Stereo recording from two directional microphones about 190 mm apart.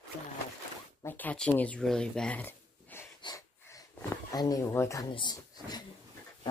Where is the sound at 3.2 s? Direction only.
20° left (ahead or behind).